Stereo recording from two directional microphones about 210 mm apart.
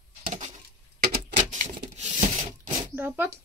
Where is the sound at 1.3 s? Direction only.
35° right (ahead or behind).